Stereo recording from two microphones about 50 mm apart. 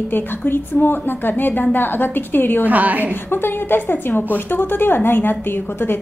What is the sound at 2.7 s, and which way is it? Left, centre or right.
Speech, right.